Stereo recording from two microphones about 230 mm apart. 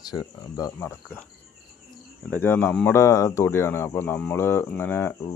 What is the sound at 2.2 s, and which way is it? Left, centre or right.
Speech, centre.